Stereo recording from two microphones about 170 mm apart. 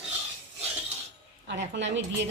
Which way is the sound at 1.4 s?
90° right.